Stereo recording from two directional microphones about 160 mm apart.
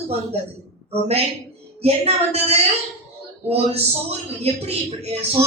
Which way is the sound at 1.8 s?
40° right (ahead or behind).